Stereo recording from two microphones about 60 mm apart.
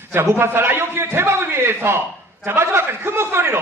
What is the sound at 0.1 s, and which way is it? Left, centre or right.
A man's voice, right.